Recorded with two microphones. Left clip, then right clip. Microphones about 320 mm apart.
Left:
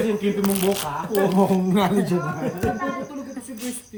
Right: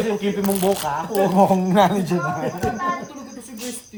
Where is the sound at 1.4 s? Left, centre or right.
Centre.